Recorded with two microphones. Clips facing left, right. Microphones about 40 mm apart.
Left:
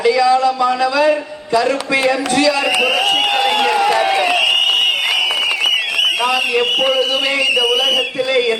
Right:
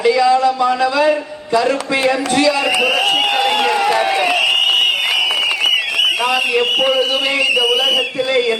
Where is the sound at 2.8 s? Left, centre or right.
Centre.